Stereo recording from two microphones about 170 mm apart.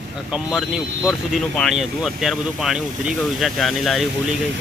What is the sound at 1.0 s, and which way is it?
Speech, centre (ahead or behind).